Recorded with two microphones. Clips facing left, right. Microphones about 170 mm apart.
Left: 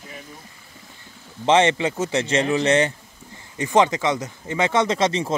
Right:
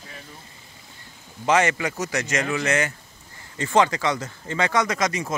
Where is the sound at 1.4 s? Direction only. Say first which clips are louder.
Left 3 dB; 30° left (ahead or behind).